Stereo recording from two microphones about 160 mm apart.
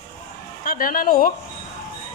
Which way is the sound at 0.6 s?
60° left (ahead or behind).